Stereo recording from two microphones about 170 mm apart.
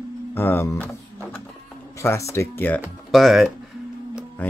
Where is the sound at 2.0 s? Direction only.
15° left (ahead or behind).